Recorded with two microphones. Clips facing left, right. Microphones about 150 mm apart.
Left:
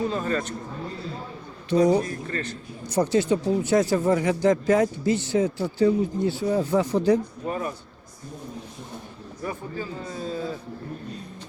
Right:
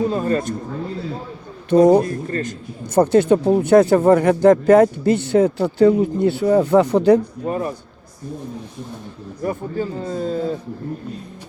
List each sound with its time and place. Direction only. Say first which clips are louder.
0.1 s speech: right 6 dB; 40° right (ahead or behind)
1.7 s speech: right 7 dB; 50° right (ahead or behind)
7.4 s speech: right 6 dB; 35° right (ahead or behind)
9.4 s speech: right 8 dB; 45° right (ahead or behind)
10.2 s speech: right 8 dB; 65° right (ahead or behind)